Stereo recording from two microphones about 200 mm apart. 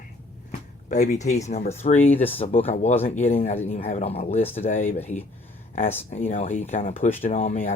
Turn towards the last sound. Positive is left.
turn(degrees=35)  # may be behind; listen again after turning